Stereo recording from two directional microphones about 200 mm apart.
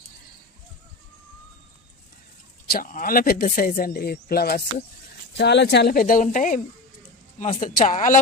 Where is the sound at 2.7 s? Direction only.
45° left (ahead or behind).